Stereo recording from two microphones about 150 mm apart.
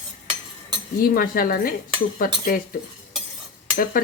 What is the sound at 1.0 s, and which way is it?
Speech, 75° left (ahead or behind).